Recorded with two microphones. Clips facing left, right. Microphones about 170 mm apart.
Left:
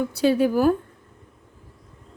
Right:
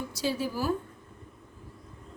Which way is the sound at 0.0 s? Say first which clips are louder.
Left 11 dB; 60° left (ahead or behind).